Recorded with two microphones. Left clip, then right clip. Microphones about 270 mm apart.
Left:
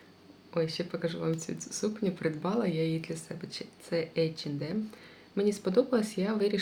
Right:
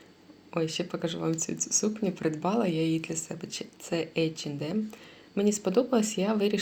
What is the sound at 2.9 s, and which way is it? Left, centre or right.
Speech, centre.